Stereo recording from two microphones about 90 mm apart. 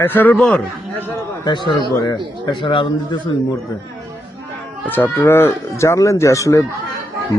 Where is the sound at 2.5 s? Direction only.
65° left (ahead or behind).